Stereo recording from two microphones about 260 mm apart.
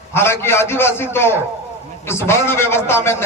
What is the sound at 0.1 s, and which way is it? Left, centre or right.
A man's voice, centre.